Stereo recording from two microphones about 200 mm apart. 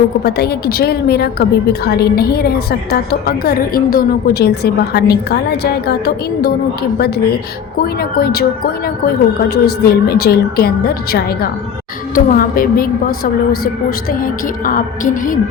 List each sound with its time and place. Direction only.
0.3 s a woman's voice: 55° left (ahead or behind)
7.8 s a woman's voice: 50° left (ahead or behind)